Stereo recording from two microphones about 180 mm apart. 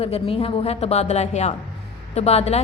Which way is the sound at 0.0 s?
35° left (ahead or behind).